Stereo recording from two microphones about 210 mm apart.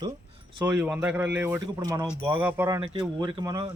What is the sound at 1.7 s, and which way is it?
Speech, 20° right (ahead or behind).